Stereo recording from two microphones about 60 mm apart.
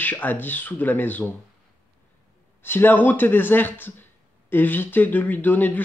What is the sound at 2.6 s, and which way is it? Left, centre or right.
Speech, left.